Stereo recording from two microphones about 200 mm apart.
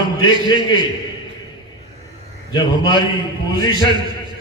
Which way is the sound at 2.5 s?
20° left (ahead or behind).